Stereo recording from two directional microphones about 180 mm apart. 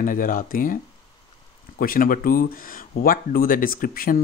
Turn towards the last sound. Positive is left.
turn(degrees=55)  # may be behind; listen again after turning